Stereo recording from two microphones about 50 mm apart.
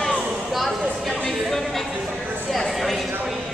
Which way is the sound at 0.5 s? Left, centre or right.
Centre.